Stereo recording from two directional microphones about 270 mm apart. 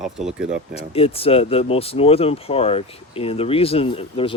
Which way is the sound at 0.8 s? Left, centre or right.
Left.